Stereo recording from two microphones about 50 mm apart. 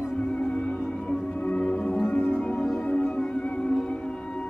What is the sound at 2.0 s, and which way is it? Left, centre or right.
Music, left.